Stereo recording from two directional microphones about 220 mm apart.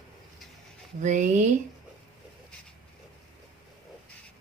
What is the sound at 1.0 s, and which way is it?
Speech, 35° right (ahead or behind).